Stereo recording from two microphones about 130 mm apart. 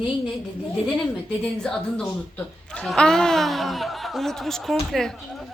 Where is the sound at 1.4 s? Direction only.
5° left (ahead or behind).